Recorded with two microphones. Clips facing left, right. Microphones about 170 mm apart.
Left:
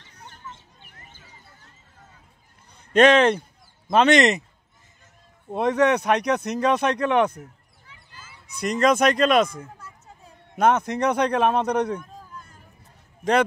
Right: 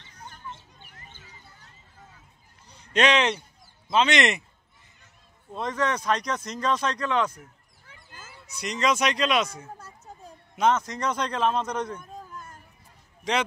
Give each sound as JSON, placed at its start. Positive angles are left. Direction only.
{"t": 2.7, "sound": "speech", "side_deg": 50}
{"t": 5.5, "sound": "speech", "side_deg": 65}
{"t": 7.8, "sound": "honk", "side_deg": -45}
{"t": 8.5, "sound": "speech", "side_deg": 55}
{"t": 9.8, "sound": "a sound", "side_deg": -40}
{"t": 10.5, "sound": "speech", "side_deg": 60}
{"t": 12.0, "sound": "a sound", "side_deg": -45}